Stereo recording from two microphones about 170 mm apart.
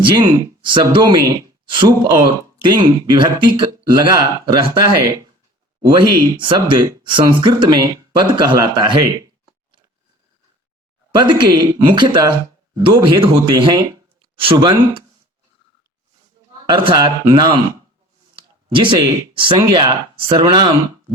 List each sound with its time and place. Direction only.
0.0 s speech: 25° right (ahead or behind)
11.1 s speech: 25° right (ahead or behind)
16.6 s speech: 30° right (ahead or behind)